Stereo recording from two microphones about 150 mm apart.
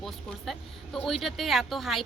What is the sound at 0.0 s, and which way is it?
Speech, centre (ahead or behind).